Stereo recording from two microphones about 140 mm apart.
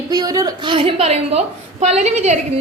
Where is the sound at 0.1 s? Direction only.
25° right (ahead or behind).